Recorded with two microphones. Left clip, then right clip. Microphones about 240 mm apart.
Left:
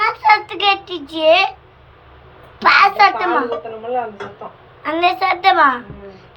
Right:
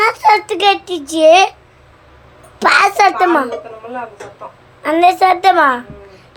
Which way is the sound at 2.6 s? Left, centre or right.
Centre.